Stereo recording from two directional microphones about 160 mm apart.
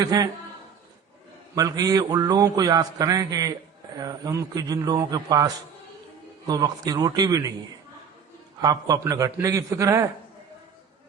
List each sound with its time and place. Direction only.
0.0 s a man's voice: 25° right (ahead or behind)
1.5 s a man's voice: 25° right (ahead or behind)
6.5 s a man's voice: 25° right (ahead or behind)
8.6 s a man's voice: 25° right (ahead or behind)